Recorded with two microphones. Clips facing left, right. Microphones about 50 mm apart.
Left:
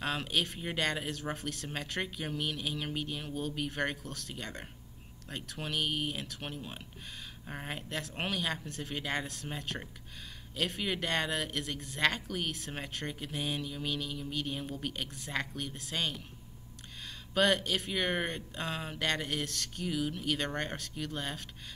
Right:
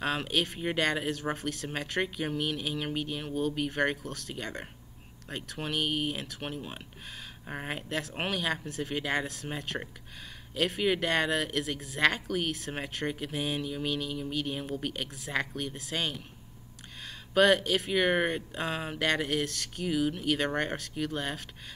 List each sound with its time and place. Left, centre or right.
0.0 s speech: centre
7.9 s speech: centre
17.3 s speech: centre